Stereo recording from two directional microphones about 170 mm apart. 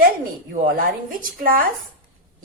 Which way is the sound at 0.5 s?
55° right (ahead or behind).